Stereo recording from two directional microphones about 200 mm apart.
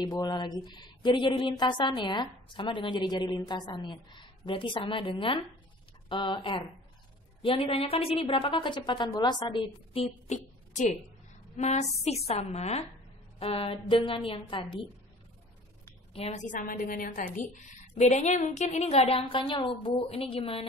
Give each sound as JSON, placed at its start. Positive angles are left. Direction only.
{"t": 0.0, "sound": "a woman's voice", "side_deg": 20}
{"t": 16.1, "sound": "a woman's voice", "side_deg": 30}